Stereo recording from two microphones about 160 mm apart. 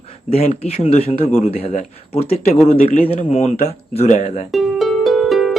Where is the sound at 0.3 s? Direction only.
40° left (ahead or behind).